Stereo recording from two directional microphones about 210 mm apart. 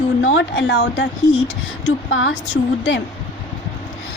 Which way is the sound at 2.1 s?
65° left (ahead or behind).